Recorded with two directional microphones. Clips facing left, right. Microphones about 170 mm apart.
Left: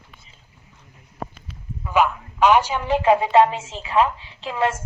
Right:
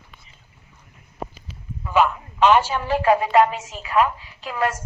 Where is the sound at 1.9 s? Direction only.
15° left (ahead or behind).